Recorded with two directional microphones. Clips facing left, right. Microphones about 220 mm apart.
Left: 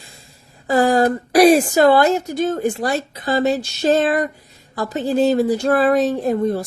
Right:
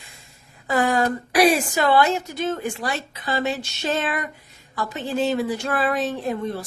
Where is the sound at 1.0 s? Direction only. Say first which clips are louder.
Left 6 dB; 40° left (ahead or behind).